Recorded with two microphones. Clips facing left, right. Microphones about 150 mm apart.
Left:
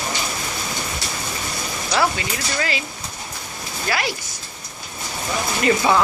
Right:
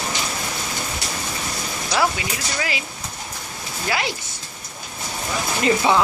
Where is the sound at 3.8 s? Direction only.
20° right (ahead or behind).